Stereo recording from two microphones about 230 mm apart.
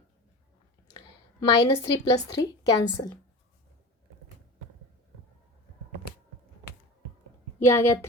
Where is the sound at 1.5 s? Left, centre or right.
Centre.